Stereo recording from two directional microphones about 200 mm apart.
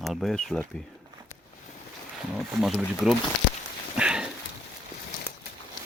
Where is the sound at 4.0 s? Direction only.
5° right (ahead or behind).